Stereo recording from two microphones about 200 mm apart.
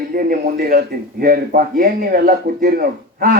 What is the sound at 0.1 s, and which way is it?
A man's voice, 45° right (ahead or behind).